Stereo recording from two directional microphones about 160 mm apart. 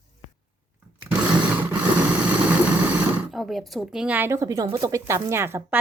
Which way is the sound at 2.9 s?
Centre (ahead or behind).